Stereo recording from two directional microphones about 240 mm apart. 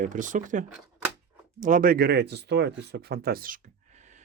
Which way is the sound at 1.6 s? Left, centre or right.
Right.